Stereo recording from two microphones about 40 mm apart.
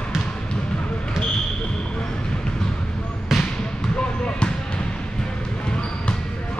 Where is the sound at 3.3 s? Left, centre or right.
Centre.